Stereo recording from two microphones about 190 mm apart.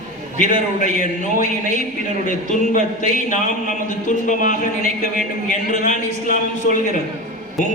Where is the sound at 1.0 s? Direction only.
45° left (ahead or behind).